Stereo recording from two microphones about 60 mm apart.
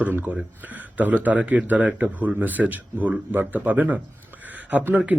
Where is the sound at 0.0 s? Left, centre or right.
Right.